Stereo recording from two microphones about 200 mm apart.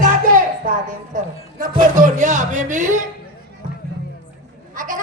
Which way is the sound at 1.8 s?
40° right (ahead or behind).